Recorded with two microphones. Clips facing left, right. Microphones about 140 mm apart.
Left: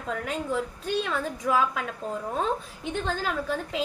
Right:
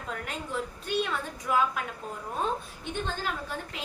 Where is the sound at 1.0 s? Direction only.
90° left.